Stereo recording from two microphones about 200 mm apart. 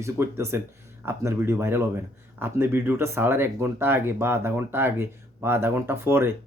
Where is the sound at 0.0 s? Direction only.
15° right (ahead or behind).